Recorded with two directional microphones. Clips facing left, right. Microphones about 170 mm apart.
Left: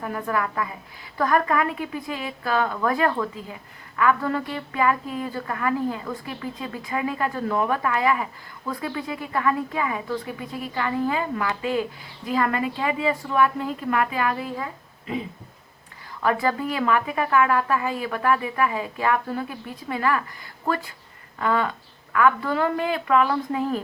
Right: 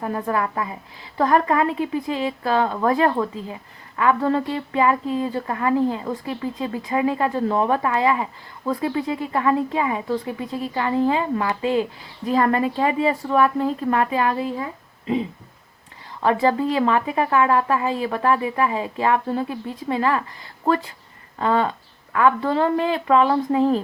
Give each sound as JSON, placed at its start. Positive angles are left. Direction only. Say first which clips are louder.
{"t": 0.0, "sound": "a woman's voice", "louder": "right 3 dB", "side_deg": -30}
{"t": 16.2, "sound": "a woman's voice", "louder": "right 4 dB", "side_deg": -25}